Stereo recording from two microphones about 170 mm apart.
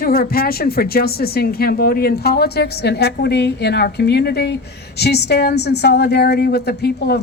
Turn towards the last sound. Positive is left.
turn(degrees=75)  # may be behind; listen again after turning